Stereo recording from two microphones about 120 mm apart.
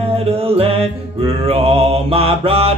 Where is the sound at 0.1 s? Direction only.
55° right (ahead or behind).